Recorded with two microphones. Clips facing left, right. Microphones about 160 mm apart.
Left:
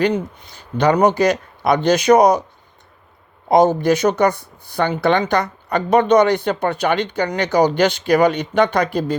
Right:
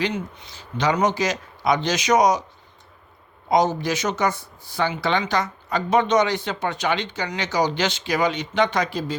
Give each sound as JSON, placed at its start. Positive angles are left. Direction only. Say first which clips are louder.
{"t": 0.8, "sound": "speech", "louder": "left 7 dB", "side_deg": 55}
{"t": 3.5, "sound": "speech", "louder": "left 7 dB", "side_deg": 55}